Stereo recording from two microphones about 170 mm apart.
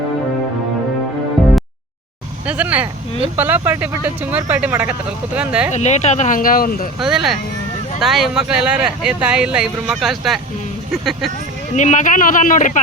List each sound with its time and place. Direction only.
2.5 s speech: 10° right (ahead or behind)
5.7 s speech: 40° left (ahead or behind); by 6.8 s 60° left (ahead or behind)
7.0 s speech: centre (ahead or behind)
11.8 s speech: 45° left (ahead or behind)